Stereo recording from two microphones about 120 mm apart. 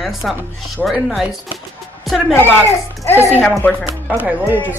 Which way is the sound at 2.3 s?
20° left (ahead or behind).